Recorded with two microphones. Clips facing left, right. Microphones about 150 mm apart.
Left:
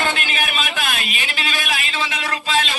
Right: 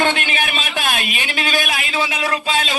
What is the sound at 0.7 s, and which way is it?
Speech, 45° right (ahead or behind).